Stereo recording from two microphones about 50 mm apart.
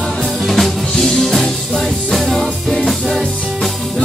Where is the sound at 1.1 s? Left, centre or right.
Centre.